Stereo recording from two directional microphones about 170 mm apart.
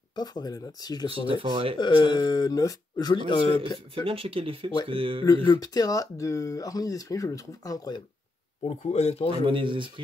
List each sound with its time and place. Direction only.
0.1 s speech: 25° left (ahead or behind)
1.2 s speech: 30° right (ahead or behind)
1.8 s speech: 25° left (ahead or behind)
3.9 s speech: 30° right (ahead or behind)
5.2 s speech: 25° left (ahead or behind)
8.6 s speech: 35° left (ahead or behind)
9.5 s speech: 30° right (ahead or behind)